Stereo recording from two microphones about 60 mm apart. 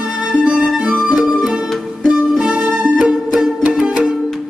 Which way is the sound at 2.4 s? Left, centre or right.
Right.